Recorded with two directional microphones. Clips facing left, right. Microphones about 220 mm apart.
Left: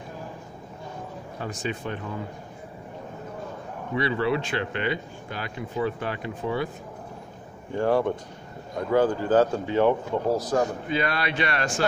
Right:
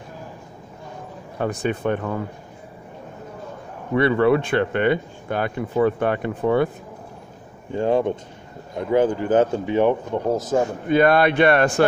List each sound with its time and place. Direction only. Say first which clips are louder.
1.4 s speech: right 9 dB; 60° right (ahead or behind)
3.9 s speech: right 8 dB; 55° right (ahead or behind)
7.7 s speech: right 3 dB; 20° right (ahead or behind)
10.9 s speech: right 10 dB; 55° right (ahead or behind)